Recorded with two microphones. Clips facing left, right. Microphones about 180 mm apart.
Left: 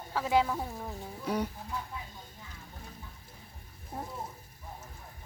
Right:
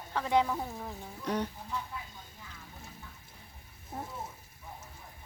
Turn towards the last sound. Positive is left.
turn(degrees=-5)  # may be behind; listen again after turning